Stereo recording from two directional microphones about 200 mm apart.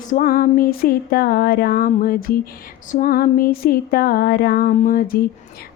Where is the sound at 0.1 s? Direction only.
45° left (ahead or behind).